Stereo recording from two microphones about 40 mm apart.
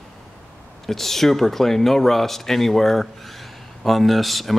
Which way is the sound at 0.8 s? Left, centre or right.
Centre.